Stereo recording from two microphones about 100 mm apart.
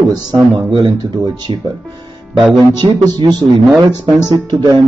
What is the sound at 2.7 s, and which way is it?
Speech, 45° right (ahead or behind).